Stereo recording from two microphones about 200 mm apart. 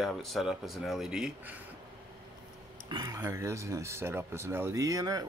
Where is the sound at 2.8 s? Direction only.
20° right (ahead or behind).